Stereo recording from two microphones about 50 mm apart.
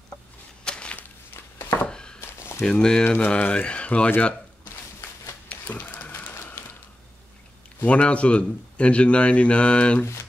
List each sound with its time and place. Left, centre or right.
0.7 s a sound: left
0.9 s walk: left
1.9 s a sound: centre
2.6 s speech: centre
3.0 s speech: left
3.3 s a man's voice: left
5.7 s printer: left
6.3 s a sound: left
7.8 s a man's voice: left